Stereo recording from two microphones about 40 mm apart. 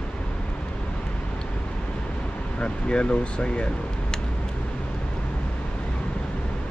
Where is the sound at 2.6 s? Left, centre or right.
Left.